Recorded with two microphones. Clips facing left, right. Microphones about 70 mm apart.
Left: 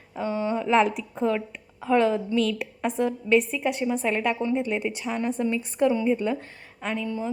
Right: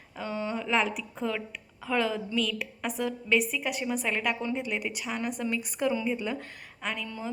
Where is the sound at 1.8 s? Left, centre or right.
Left.